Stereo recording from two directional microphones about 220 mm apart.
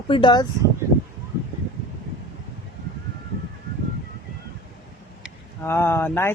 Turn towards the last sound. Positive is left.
turn(degrees=10)  # may be behind; listen again after turning